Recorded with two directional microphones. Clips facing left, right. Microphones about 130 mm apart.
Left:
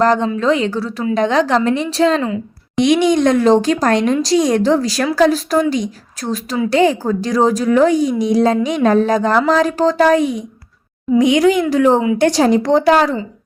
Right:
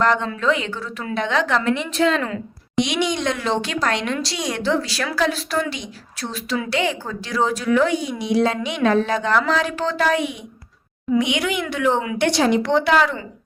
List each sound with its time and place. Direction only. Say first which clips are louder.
0.0 s a woman's voice: left 5 dB; 35° left (ahead or behind)
2.7 s a woman's voice: left 9 dB; 50° left (ahead or behind)